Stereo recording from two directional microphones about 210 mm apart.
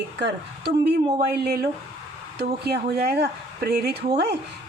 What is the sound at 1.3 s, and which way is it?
Speech, 50° right (ahead or behind).